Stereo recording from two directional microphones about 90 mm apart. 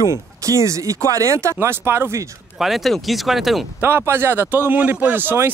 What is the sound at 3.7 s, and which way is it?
A man's voice, 25° right (ahead or behind).